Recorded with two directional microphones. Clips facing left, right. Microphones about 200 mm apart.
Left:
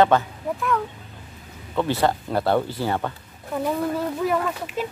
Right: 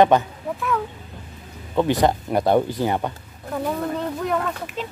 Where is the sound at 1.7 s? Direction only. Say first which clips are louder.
Right 3 dB; 15° right (ahead or behind).